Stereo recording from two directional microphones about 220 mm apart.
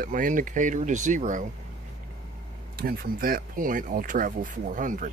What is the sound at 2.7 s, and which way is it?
Speech, 45° right (ahead or behind).